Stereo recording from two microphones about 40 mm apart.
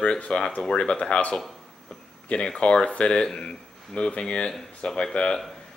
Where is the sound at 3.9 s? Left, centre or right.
Left.